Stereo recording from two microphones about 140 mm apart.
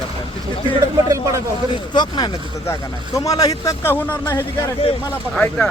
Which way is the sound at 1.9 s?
30° left (ahead or behind).